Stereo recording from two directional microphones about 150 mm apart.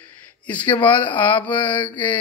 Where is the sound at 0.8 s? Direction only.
10° left (ahead or behind).